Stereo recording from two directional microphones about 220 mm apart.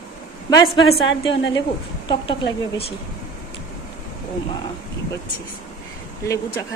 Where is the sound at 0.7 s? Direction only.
20° left (ahead or behind).